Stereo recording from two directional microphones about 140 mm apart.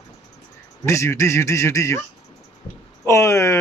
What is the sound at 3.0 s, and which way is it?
Speech, 20° left (ahead or behind).